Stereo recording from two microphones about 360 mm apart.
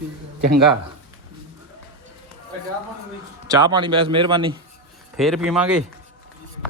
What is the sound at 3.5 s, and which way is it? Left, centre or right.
Speech, centre.